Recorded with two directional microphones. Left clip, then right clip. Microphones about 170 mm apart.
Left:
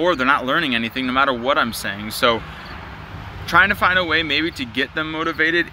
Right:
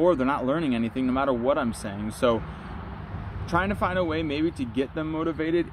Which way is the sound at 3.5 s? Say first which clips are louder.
Left 11 dB; 10° right (ahead or behind).